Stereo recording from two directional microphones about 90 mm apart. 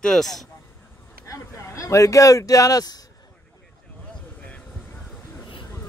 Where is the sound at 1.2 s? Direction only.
30° left (ahead or behind).